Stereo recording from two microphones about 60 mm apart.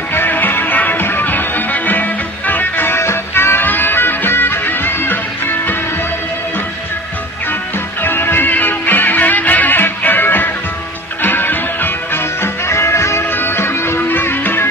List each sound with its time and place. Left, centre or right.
0.1 s music: left
3.0 s music: left
8.0 s music: left
13.3 s music: left